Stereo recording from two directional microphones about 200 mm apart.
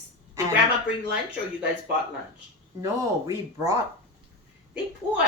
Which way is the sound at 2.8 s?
15° right (ahead or behind).